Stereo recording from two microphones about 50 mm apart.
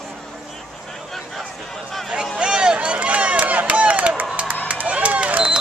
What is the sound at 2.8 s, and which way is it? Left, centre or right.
Run, right.